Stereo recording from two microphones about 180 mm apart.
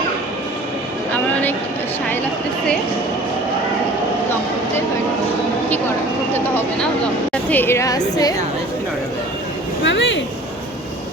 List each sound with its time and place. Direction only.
6.3 s a woman's voice: 10° left (ahead or behind)
9.8 s speech: 90° left